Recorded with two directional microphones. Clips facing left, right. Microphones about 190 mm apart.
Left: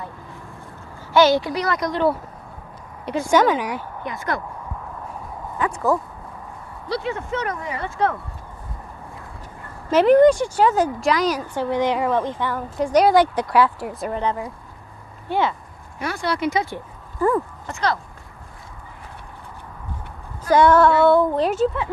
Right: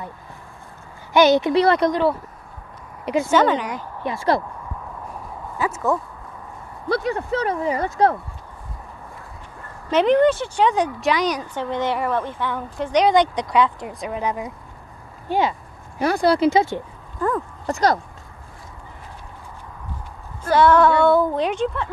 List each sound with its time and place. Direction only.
1.1 s speech: 20° right (ahead or behind)
3.3 s speech: 10° left (ahead or behind)
4.0 s speech: 30° right (ahead or behind)
5.6 s speech: centre (ahead or behind)
6.9 s speech: 40° right (ahead or behind)
9.8 s speech: 5° left (ahead or behind)
14.2 s speech: 15° right (ahead or behind)
16.0 s speech: 35° right (ahead or behind)
17.6 s speech: 40° right (ahead or behind)
20.5 s speech: 15° left (ahead or behind)
20.8 s speech: centre (ahead or behind)